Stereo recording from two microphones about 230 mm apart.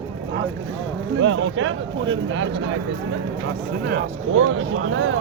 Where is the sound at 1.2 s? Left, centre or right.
Right.